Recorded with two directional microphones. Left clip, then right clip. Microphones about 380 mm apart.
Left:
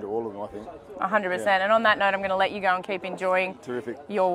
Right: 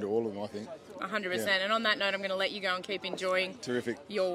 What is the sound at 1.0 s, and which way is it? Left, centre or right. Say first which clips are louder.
A woman's voice: left 9 dB; centre.